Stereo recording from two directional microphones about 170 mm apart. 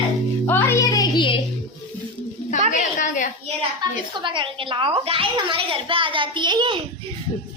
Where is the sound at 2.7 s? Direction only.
50° left (ahead or behind).